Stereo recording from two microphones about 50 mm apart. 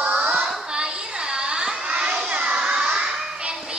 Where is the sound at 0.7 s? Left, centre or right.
Centre.